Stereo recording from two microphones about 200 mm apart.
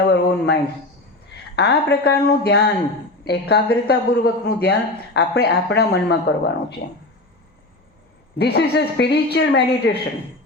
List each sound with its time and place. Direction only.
0.0 s a sound: 55° left (ahead or behind)
1.5 s a woman's voice: 55° left (ahead or behind)
8.4 s speech: 55° left (ahead or behind)